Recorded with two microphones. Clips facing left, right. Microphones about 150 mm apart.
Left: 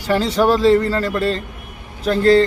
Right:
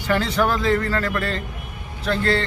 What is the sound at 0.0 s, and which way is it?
A man's voice, 35° left (ahead or behind).